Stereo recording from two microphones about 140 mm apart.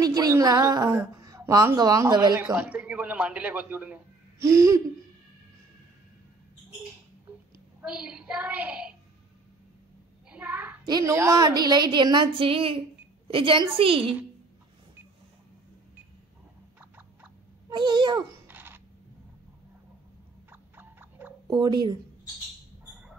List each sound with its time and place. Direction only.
0.0 s a woman's voice: 25° right (ahead or behind)
2.3 s a man's voice: 10° right (ahead or behind)
4.5 s hoot: 25° right (ahead or behind)
7.8 s a man's voice: 5° right (ahead or behind)
10.3 s child singing: 10° right (ahead or behind)
10.9 s a woman's voice: 25° right (ahead or behind); by 14.1 s 40° right (ahead or behind)
17.6 s a child's voice: 35° right (ahead or behind)
18.5 s a sound: 15° right (ahead or behind)
20.7 s a sound: 15° right (ahead or behind)
21.5 s a woman's voice: 30° right (ahead or behind)